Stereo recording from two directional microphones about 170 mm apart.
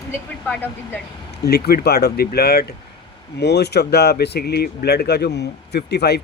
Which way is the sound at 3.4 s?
75° left (ahead or behind).